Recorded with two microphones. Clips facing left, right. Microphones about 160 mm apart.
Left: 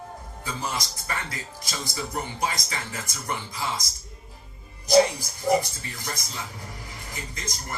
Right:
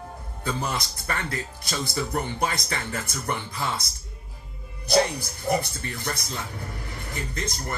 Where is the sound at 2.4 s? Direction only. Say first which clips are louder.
Right 2 dB; 55° right (ahead or behind).